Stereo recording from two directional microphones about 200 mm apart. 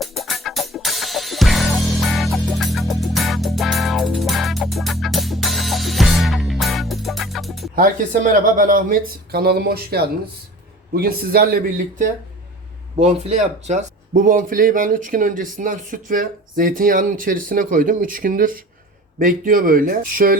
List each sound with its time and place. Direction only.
0.0 s music: centre (ahead or behind)
7.8 s speech: 40° right (ahead or behind)
13.0 s speech: 30° right (ahead or behind)